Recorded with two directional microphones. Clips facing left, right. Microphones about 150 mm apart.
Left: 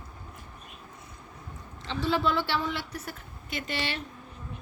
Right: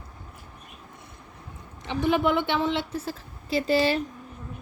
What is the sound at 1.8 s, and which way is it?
A woman's voice, 15° right (ahead or behind).